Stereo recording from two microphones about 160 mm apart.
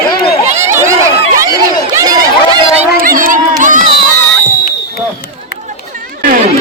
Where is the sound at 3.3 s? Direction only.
55° right (ahead or behind).